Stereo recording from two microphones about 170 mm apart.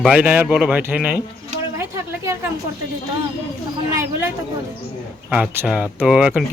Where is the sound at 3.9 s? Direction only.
15° right (ahead or behind).